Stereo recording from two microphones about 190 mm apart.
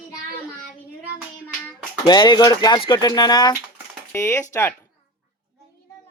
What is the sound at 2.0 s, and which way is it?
Speech, 25° left (ahead or behind).